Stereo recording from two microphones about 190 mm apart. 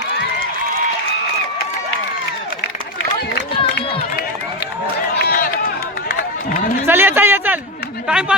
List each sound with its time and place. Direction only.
5.1 s run: 55° left (ahead or behind)
6.8 s a sound: 10° right (ahead or behind)
8.0 s speech: 5° right (ahead or behind)